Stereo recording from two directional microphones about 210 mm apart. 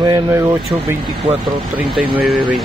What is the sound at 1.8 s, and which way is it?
Speech, centre (ahead or behind).